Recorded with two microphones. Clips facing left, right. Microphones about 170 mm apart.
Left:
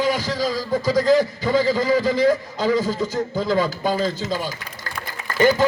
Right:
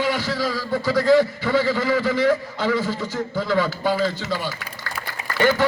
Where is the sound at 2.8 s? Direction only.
40° left (ahead or behind).